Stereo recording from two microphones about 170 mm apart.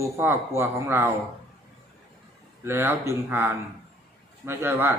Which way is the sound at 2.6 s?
15° right (ahead or behind).